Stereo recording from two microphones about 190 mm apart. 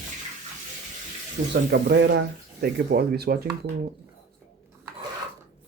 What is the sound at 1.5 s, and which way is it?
Speech, 65° right (ahead or behind).